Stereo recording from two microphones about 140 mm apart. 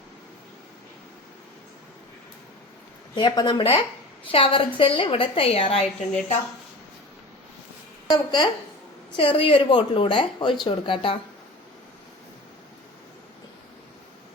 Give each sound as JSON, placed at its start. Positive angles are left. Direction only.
{"t": 3.2, "sound": "speech", "side_deg": 30}
{"t": 3.6, "sound": "speech", "side_deg": 45}
{"t": 8.1, "sound": "speech", "side_deg": 30}